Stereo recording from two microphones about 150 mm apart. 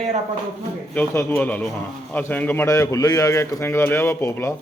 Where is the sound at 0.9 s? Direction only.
15° left (ahead or behind).